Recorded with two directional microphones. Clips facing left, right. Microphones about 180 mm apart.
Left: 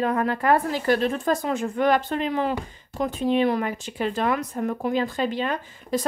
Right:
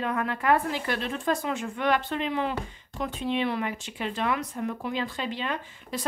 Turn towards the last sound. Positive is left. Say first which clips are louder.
# left 6 dB
turn(degrees=40)  # may be behind; listen again after turning